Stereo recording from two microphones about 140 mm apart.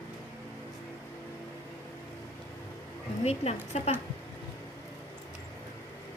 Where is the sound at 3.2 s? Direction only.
50° left (ahead or behind).